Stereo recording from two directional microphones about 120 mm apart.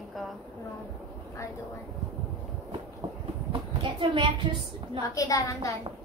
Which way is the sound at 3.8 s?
40° right (ahead or behind).